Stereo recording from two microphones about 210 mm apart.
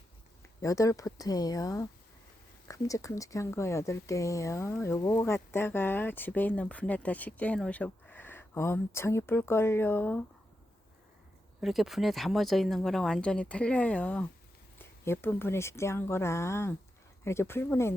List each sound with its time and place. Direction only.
0.6 s speech: 15° left (ahead or behind)
11.6 s speech: centre (ahead or behind)